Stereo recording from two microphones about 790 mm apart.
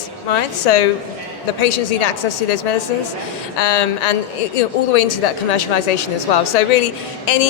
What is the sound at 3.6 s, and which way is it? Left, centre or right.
Speech, left.